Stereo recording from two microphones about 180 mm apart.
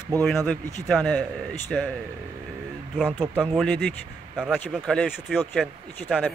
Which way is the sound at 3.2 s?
5° right (ahead or behind).